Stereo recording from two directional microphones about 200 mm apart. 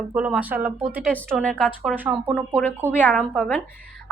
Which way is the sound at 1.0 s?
5° left (ahead or behind).